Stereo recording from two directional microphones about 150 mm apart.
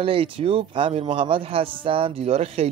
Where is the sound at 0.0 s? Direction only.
40° right (ahead or behind).